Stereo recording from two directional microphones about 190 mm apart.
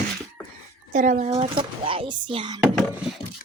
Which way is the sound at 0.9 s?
40° right (ahead or behind).